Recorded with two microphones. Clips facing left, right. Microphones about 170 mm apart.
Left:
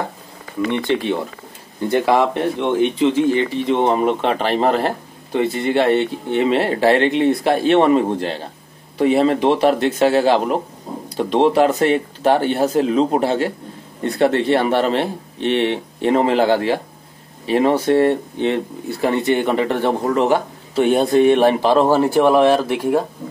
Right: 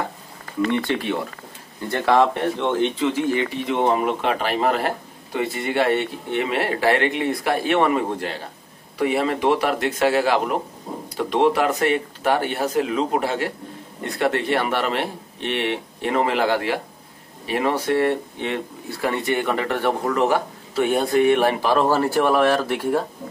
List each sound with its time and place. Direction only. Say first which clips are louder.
0.7 s speech: left 4 dB; 20° left (ahead or behind)